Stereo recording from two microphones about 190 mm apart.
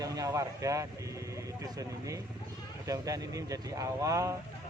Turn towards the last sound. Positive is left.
turn(degrees=-15)  # may be behind; listen again after turning